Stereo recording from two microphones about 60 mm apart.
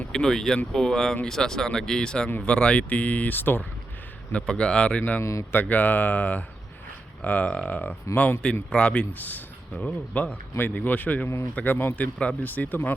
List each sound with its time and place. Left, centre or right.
0.1 s speech: centre; by 3.7 s left
4.3 s speech: centre
5.2 s speech: left
5.5 s speech: left
12.2 s speech: centre
12.5 s speech: left